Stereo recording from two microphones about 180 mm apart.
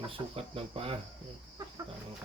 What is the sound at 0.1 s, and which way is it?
Speech, 30° right (ahead or behind).